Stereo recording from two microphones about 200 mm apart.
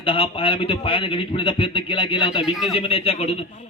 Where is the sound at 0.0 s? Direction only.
25° left (ahead or behind).